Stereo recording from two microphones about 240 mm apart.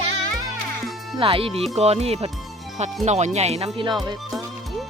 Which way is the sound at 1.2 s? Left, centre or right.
Right.